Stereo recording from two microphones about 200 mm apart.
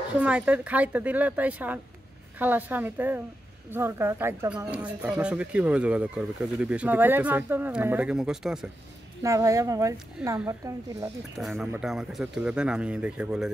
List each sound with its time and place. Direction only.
0.1 s speech: 5° right (ahead or behind)
9.2 s speech: 15° right (ahead or behind)